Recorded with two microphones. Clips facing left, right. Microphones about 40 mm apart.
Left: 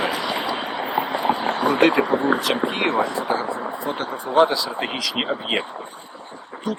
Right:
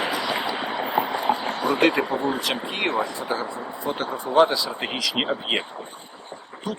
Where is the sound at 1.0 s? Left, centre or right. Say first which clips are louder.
Left 2 dB; left.